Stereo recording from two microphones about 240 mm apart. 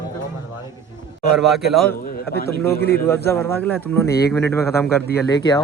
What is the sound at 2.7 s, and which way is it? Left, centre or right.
Speech, left.